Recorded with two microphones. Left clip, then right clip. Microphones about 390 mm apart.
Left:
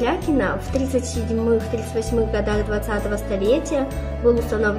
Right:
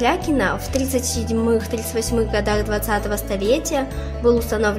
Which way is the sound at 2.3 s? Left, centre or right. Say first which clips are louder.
Right 2 dB; right.